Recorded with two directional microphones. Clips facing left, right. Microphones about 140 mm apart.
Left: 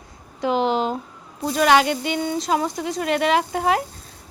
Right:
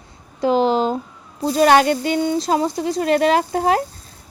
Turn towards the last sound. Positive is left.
turn(degrees=-35)  # may be behind; listen again after turning